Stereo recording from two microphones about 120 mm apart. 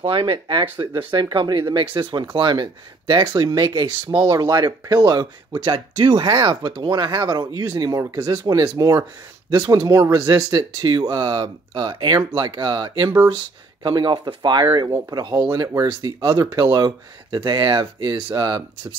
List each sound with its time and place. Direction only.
0.0 s speech: 45° right (ahead or behind)